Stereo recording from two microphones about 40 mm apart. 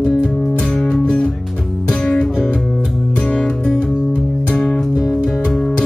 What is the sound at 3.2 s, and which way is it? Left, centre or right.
Music, left.